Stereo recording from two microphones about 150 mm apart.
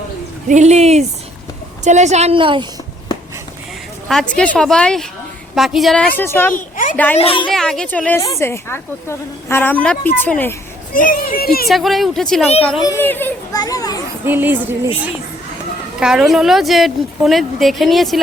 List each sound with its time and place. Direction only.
0.4 s a woman's voice: 50° right (ahead or behind); by 2.6 s 35° right (ahead or behind)
4.1 s a woman's voice: 5° left (ahead or behind)
6.1 s a woman's voice: 15° left (ahead or behind)
6.5 s a sound: 65° left (ahead or behind)
6.9 s a woman's voice: 10° left (ahead or behind)
7.2 s speech: 35° left (ahead or behind)
7.5 s a woman's voice: 5° left (ahead or behind)
10.9 s speech: 65° left (ahead or behind); by 11.7 s 90° left
11.7 s a woman's voice: centre (ahead or behind)
12.8 s a woman's voice: 20° left (ahead or behind)
13.5 s a child's voice: 25° left (ahead or behind)
14.3 s speech: 15° right (ahead or behind)
16.0 s a woman's voice: 5° right (ahead or behind)